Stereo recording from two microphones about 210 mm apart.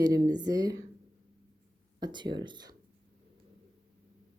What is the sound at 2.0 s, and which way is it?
Speech, 20° right (ahead or behind).